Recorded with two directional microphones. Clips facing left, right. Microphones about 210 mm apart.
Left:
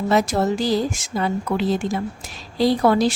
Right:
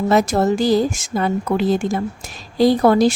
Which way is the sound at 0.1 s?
45° right (ahead or behind).